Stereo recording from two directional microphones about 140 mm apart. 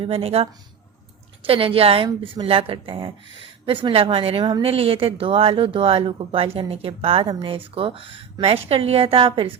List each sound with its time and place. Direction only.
0.0 s a woman's voice: 45° right (ahead or behind)